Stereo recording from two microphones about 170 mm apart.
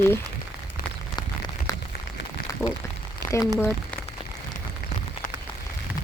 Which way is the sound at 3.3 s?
15° left (ahead or behind).